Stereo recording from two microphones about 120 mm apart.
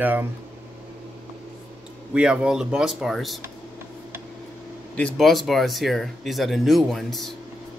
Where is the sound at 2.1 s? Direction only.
10° right (ahead or behind).